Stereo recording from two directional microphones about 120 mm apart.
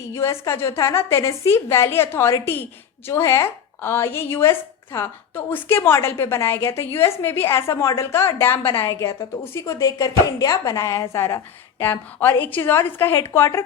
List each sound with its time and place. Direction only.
0.1 s a woman's voice: 25° left (ahead or behind)